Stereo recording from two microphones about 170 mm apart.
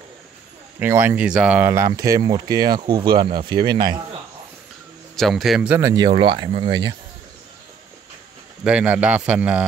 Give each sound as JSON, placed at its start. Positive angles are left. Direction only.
{"t": 0.7, "sound": "speech", "side_deg": -10}
{"t": 5.1, "sound": "a man's voice", "side_deg": 0}
{"t": 5.8, "sound": "speech", "side_deg": -15}
{"t": 6.0, "sound": "speech", "side_deg": -30}
{"t": 8.6, "sound": "speech", "side_deg": -5}